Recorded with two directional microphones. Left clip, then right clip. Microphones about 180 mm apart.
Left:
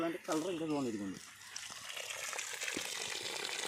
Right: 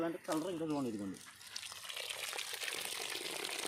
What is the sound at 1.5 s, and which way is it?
Water, 45° right (ahead or behind).